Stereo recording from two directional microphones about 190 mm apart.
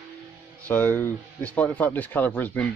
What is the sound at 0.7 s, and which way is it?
A man's voice, 10° left (ahead or behind).